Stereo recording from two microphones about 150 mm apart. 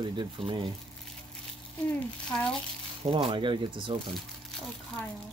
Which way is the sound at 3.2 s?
35° right (ahead or behind).